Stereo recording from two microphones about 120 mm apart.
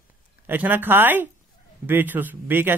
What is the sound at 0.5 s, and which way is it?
Speech, 15° right (ahead or behind).